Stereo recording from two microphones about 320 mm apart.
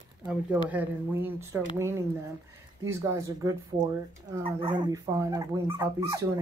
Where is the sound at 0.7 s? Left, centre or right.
Centre.